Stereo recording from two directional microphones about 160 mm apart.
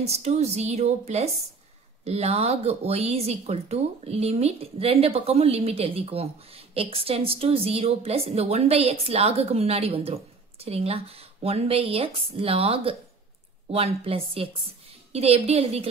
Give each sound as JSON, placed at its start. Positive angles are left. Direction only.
{"t": 0.0, "sound": "speech", "side_deg": -45}